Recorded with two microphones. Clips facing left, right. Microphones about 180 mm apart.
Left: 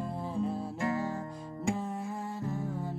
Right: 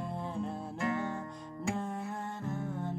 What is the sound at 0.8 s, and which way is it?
Music, 35° left (ahead or behind).